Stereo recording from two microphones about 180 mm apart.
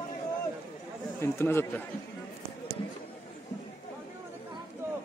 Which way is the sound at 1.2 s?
15° left (ahead or behind).